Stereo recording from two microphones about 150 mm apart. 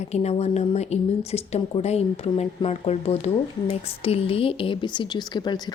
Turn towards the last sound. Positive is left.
turn(degrees=30)  # may be behind; listen again after turning